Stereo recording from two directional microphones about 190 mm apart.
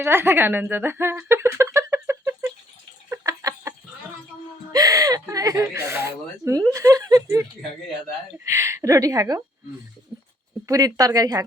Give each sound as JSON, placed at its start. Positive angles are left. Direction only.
{"t": 0.0, "sound": "speech", "side_deg": -10}
{"t": 3.1, "sound": "a sound", "side_deg": -15}
{"t": 4.7, "sound": "speech", "side_deg": -20}
{"t": 8.4, "sound": "speech", "side_deg": -15}
{"t": 10.7, "sound": "a woman's voice", "side_deg": -20}